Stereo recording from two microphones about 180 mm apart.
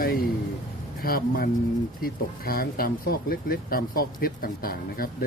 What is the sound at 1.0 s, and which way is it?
Speech, 55° left (ahead or behind).